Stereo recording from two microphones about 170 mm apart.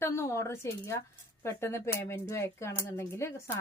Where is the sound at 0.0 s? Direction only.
15° left (ahead or behind).